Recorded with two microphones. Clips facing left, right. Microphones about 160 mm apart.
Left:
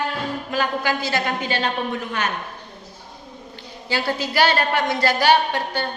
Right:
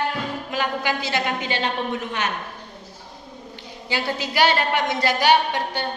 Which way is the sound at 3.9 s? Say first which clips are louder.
Left 2 dB; 20° right (ahead or behind).